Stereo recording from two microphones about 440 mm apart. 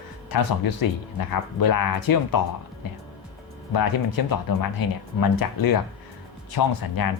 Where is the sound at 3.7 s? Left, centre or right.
Left.